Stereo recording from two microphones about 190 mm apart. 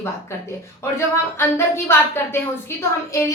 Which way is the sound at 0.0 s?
15° left (ahead or behind).